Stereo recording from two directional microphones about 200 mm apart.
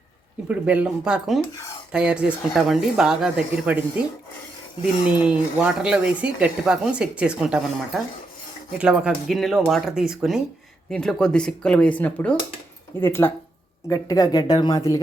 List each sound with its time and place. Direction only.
0.4 s speech: 5° right (ahead or behind)
5.0 s speech: 5° right (ahead or behind); by 15.0 s 15° left (ahead or behind)